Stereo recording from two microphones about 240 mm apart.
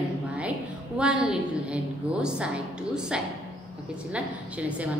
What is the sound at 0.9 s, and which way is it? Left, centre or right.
A woman's voice, centre.